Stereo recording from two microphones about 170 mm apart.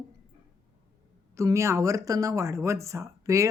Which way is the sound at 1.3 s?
20° right (ahead or behind).